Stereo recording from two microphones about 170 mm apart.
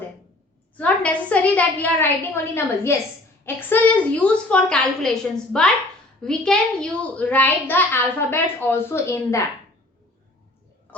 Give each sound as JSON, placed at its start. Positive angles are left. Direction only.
{"t": 0.8, "sound": "a woman's voice", "side_deg": 10}